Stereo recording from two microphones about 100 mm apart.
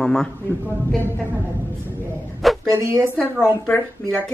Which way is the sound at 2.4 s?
Centre (ahead or behind).